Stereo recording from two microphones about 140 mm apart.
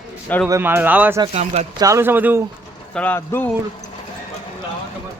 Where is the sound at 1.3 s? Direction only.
50° right (ahead or behind).